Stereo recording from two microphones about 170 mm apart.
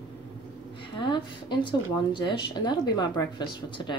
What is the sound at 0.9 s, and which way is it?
Speech, 25° left (ahead or behind).